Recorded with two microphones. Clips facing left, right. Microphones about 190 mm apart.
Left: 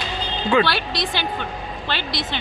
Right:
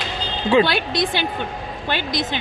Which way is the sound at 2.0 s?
50° right (ahead or behind).